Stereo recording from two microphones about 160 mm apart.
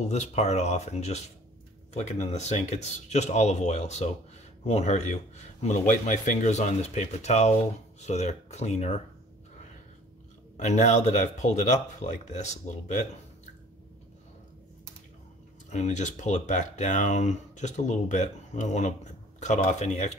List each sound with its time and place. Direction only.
0.1 s speech: 45° left (ahead or behind)
10.6 s speech: 45° left (ahead or behind)
15.7 s speech: 45° left (ahead or behind)